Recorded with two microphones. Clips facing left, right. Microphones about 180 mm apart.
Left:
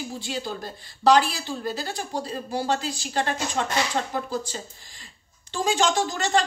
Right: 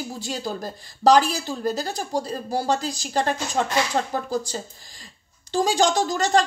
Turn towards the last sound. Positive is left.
turn(degrees=-40)  # may be behind; listen again after turning